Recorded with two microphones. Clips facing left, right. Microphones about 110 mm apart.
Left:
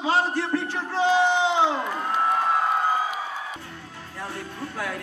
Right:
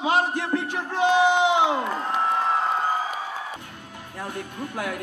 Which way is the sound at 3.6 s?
20° right (ahead or behind).